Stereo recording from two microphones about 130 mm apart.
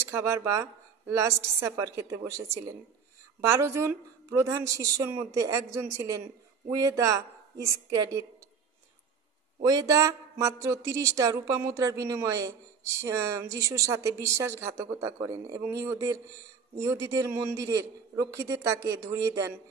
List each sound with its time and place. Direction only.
0.0 s speech: 20° right (ahead or behind)
9.6 s speech: 30° right (ahead or behind)